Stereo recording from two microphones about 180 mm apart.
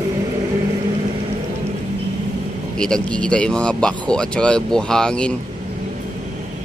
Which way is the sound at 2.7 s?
5° left (ahead or behind).